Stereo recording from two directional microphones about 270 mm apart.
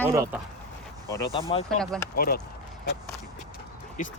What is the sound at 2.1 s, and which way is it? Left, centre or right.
Speech, left.